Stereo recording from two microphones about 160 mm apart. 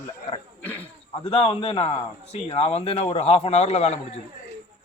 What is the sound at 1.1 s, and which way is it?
A man's voice, 40° left (ahead or behind).